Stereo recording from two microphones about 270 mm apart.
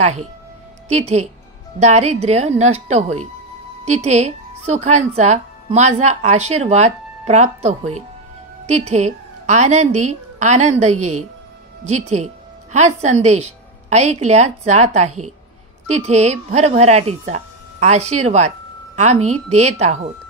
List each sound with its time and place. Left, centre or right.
0.0 s a woman's voice: right